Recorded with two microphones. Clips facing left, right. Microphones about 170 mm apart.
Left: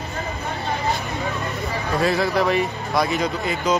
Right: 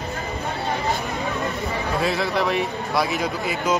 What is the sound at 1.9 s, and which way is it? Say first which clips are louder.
Speech: left 4 dB; centre (ahead or behind).